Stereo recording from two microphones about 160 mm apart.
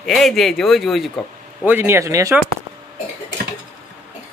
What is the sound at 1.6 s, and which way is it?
Speech, 10° right (ahead or behind).